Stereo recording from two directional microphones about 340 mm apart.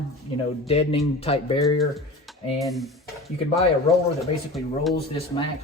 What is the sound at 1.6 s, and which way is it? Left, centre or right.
Speech, centre.